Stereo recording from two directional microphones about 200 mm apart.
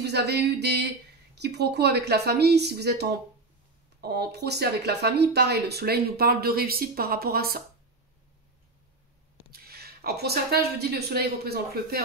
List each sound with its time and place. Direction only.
0.0 s a woman's voice: 55° right (ahead or behind)
9.5 s speech: 50° right (ahead or behind)